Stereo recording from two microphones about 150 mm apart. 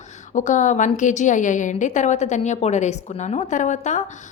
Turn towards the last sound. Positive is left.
turn(degrees=55)  # may be behind; listen again after turning